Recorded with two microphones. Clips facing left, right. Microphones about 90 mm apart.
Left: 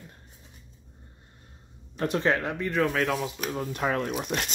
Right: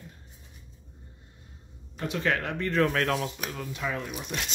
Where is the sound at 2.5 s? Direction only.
5° left (ahead or behind).